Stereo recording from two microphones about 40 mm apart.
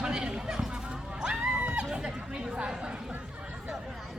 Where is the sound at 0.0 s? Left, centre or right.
Centre.